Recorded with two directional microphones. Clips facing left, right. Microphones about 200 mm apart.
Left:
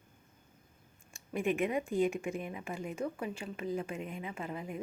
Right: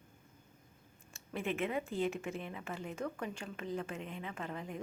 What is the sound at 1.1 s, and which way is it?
A woman's voice, 15° left (ahead or behind).